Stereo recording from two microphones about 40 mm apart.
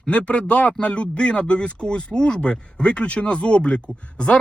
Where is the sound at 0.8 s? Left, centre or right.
Left.